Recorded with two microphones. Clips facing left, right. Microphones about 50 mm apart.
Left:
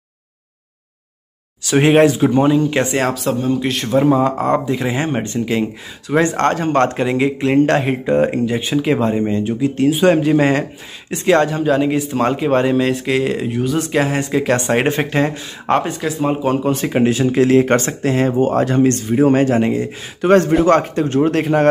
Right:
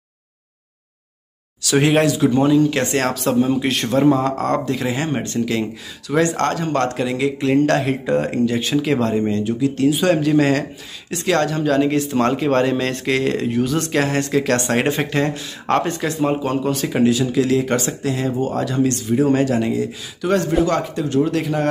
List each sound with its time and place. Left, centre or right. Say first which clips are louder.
1.6 s speech: left 4 dB; left
2.9 s speech: left 1 dB; centre
4.2 s speech: left 3 dB; centre
16.7 s speech: left 1 dB; left